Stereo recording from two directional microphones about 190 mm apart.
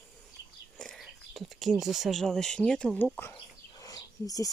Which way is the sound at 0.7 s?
Centre (ahead or behind).